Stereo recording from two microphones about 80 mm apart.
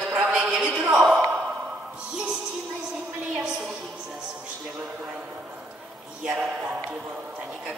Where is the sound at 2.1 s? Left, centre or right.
Centre.